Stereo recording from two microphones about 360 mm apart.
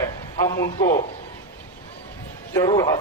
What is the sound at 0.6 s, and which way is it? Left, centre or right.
Speech, left.